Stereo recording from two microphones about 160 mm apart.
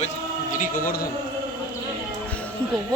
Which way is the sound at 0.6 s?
60° left (ahead or behind).